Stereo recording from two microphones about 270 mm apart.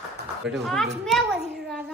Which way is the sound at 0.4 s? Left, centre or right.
Centre.